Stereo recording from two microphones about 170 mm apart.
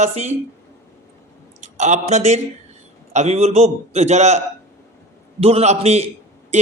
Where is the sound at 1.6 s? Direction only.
45° right (ahead or behind).